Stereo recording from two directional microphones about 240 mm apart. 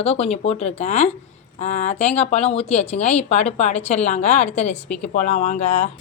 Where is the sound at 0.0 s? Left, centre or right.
Left.